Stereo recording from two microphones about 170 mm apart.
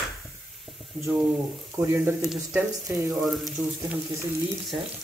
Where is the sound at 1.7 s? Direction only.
15° right (ahead or behind).